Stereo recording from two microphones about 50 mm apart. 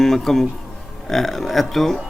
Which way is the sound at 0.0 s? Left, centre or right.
Centre.